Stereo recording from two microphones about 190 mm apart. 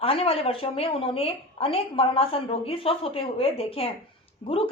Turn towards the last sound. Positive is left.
turn(degrees=30)  # may be behind; listen again after turning